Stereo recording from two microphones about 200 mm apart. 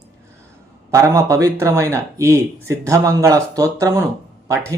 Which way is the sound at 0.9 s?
15° right (ahead or behind).